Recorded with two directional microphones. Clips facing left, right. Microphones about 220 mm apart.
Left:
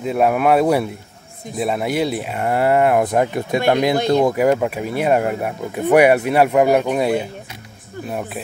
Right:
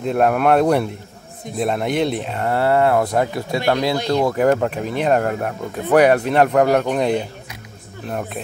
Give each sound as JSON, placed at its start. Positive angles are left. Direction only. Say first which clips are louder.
{"t": 0.0, "sound": "speech", "louder": "even", "side_deg": 5}
{"t": 4.4, "sound": "speech", "louder": "even", "side_deg": 10}